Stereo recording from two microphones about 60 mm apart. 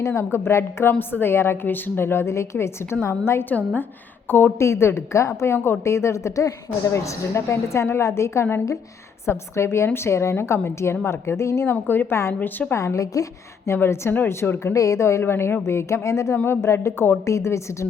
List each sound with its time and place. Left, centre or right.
0.0 s a woman's voice: left
4.3 s speech: left
4.5 s a woman's voice: left
5.5 s speech: left
5.8 s a woman's voice: left
11.7 s a woman's voice: left
12.7 s speech: left
13.7 s a woman's voice: left
14.6 s speech: left
15.2 s a woman's voice: left